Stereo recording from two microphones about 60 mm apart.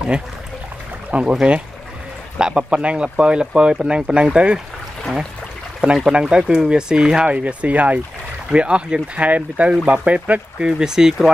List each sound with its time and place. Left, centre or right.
1.1 s speech: centre
6.0 s speech: centre
7.2 s speech: right
10.7 s speech: centre